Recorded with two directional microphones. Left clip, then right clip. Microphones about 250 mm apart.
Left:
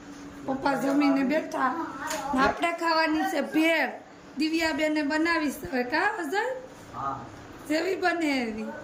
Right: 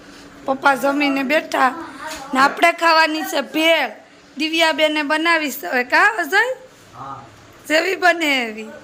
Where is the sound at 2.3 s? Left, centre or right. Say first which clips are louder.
Right 11 dB; right.